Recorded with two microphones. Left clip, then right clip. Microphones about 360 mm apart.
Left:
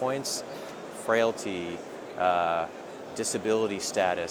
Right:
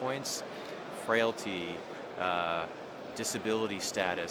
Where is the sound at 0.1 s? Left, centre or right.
Left.